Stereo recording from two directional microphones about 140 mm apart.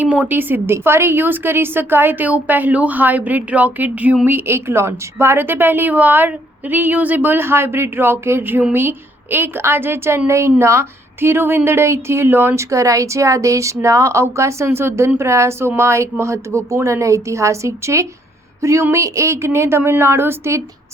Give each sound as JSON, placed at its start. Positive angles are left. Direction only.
{"t": 0.0, "sound": "a woman's voice", "side_deg": -10}